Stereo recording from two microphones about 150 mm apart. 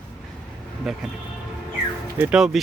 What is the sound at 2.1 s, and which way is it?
Speech, 10° right (ahead or behind).